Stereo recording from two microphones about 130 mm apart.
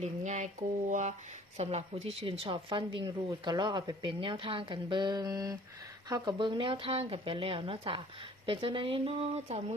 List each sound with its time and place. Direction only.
0.0 s a sound: 60° right (ahead or behind)
0.9 s speech: 75° right (ahead or behind)
1.5 s speech: 55° right (ahead or behind)